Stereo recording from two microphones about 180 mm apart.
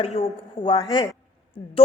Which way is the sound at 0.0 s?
35° left (ahead or behind).